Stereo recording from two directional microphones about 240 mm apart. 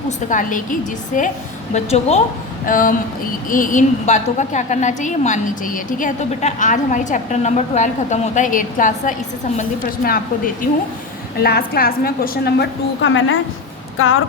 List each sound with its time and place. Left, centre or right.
0.3 s a woman's voice: left